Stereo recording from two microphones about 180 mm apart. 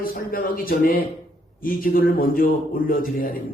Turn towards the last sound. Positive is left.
turn(degrees=50)  # may be behind; listen again after turning